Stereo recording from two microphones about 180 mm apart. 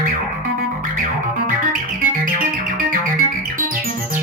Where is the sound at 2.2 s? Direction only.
50° right (ahead or behind).